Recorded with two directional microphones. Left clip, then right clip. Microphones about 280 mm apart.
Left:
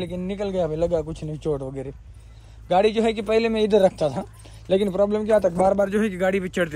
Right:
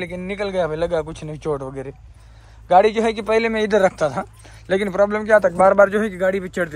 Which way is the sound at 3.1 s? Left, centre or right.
Centre.